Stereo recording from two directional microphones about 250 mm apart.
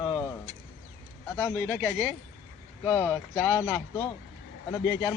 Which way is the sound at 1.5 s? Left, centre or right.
Centre.